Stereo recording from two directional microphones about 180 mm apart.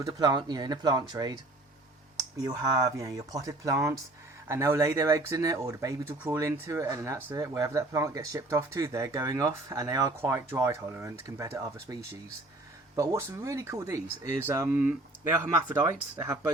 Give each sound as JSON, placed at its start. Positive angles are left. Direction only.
{"t": 0.0, "sound": "speech", "side_deg": -20}
{"t": 13.0, "sound": "speech", "side_deg": -15}
{"t": 16.1, "sound": "speech", "side_deg": -15}